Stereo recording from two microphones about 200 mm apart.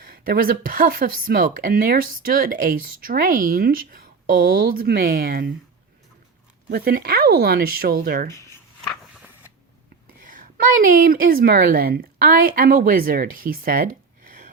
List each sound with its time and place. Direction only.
0.0 s speech: 45° right (ahead or behind)
6.7 s speech: 50° right (ahead or behind)
10.2 s a woman's voice: 45° right (ahead or behind)